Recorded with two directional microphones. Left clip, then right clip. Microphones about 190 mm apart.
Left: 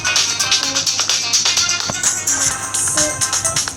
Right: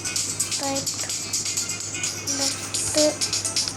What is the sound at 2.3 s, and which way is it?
Music, 55° left (ahead or behind).